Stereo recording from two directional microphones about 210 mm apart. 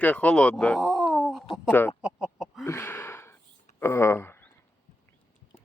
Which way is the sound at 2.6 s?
10° left (ahead or behind).